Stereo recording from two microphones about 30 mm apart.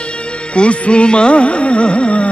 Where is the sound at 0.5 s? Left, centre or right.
Left.